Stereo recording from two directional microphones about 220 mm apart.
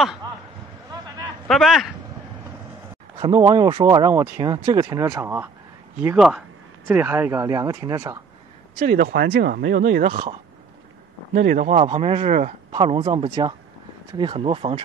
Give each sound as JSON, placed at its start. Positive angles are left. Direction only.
{"t": 1.0, "sound": "a sound", "side_deg": -20}
{"t": 1.5, "sound": "speech", "side_deg": 0}
{"t": 3.2, "sound": "speech", "side_deg": -15}
{"t": 8.7, "sound": "speech", "side_deg": -35}
{"t": 11.3, "sound": "speech", "side_deg": -35}